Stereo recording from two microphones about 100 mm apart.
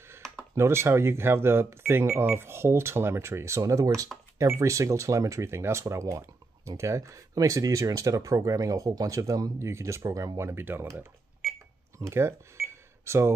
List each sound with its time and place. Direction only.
0.6 s speech: 25° right (ahead or behind)